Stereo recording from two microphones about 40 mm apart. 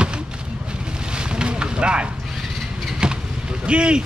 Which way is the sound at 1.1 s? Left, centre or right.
Right.